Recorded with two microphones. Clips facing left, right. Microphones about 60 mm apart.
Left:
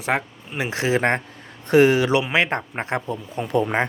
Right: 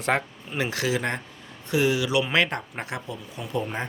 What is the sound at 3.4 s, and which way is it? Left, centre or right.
Speech, left.